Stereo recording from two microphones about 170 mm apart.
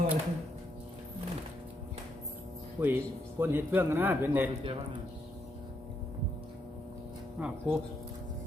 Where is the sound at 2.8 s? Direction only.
15° right (ahead or behind).